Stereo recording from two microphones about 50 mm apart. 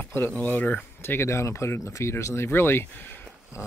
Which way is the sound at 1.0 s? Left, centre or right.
Left.